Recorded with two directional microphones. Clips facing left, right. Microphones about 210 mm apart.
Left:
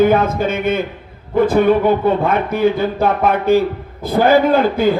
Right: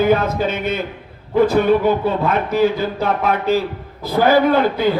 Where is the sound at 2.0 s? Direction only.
55° left (ahead or behind).